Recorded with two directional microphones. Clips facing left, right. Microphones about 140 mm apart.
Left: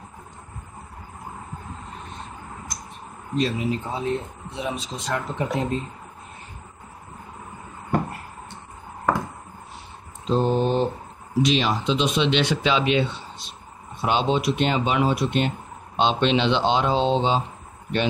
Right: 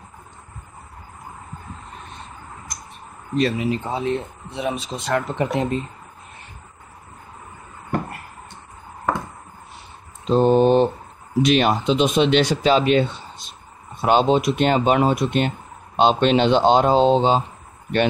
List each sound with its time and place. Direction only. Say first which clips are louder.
3.3 s speech: right 3 dB; 65° right (ahead or behind)
10.3 s mantra: right 6 dB; 65° right (ahead or behind)
11.4 s speech: right 5 dB; 55° right (ahead or behind)